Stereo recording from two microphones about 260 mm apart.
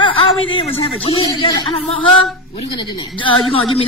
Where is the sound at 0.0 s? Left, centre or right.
Centre.